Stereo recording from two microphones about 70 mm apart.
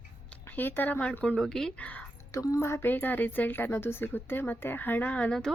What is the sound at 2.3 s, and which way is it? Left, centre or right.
Speech, left.